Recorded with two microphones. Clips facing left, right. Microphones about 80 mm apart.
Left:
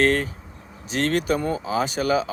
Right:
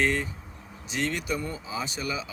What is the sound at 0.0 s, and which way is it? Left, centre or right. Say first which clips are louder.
Speech: left 6 dB; left.